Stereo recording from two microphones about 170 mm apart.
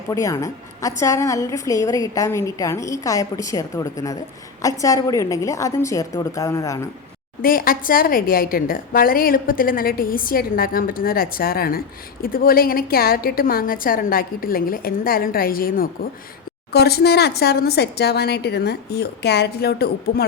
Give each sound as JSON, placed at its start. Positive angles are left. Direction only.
{"t": 0.1, "sound": "a woman's voice", "side_deg": 20}
{"t": 7.4, "sound": "a woman's voice", "side_deg": 55}
{"t": 16.7, "sound": "a woman's voice", "side_deg": 70}